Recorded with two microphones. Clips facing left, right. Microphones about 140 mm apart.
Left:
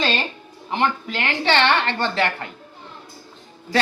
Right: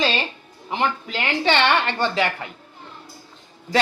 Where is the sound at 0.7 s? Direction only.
10° right (ahead or behind).